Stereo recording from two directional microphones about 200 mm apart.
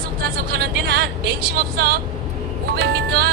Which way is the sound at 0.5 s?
55° right (ahead or behind).